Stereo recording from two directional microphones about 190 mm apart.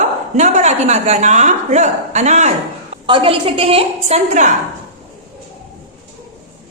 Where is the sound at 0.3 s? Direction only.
40° right (ahead or behind).